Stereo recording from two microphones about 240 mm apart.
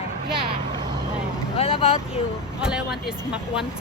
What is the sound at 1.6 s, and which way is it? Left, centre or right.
Speech, left.